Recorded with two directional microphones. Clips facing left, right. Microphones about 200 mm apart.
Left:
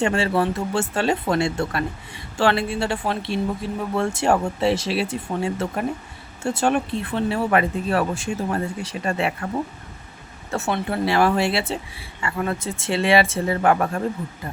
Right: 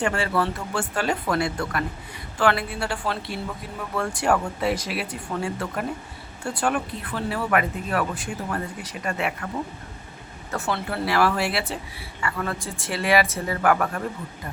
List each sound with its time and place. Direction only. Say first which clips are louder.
0.0 s speech: left 3 dB; 25° left (ahead or behind)
10.5 s speech: left 3 dB; 25° left (ahead or behind)